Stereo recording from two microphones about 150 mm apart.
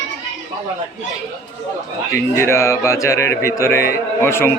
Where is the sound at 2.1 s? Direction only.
15° left (ahead or behind).